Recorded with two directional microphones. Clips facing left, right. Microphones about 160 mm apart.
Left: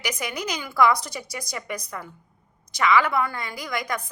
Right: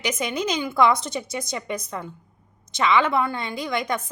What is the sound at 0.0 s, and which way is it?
A woman's voice, 25° right (ahead or behind).